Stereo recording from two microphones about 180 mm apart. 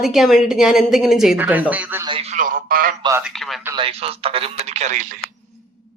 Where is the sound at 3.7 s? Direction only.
30° right (ahead or behind).